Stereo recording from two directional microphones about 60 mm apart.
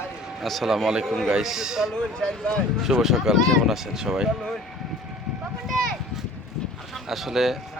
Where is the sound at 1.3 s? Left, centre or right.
Centre.